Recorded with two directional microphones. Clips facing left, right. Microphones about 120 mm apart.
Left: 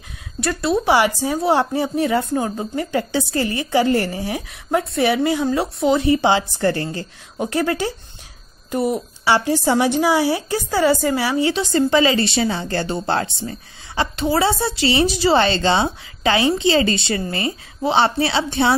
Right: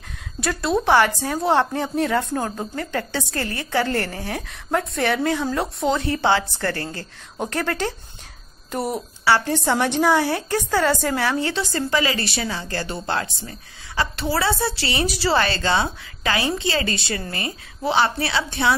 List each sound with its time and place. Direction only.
0.4 s a woman's voice: centre (ahead or behind)
9.2 s a woman's voice: 15° left (ahead or behind)